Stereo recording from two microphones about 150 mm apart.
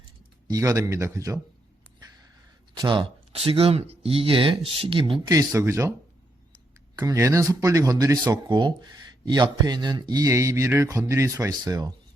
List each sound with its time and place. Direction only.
0.4 s speech: 25° right (ahead or behind)
2.7 s speech: 30° right (ahead or behind)
5.3 s speech: 20° right (ahead or behind)
6.9 s speech: 20° right (ahead or behind)